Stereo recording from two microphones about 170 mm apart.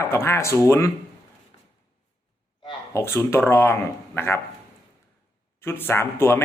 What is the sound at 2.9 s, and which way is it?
Speech, 15° left (ahead or behind).